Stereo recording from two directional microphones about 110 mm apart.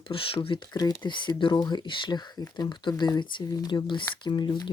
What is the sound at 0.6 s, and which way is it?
Speech, 30° left (ahead or behind).